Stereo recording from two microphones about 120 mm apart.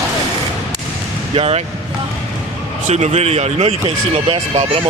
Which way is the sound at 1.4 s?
55° right (ahead or behind).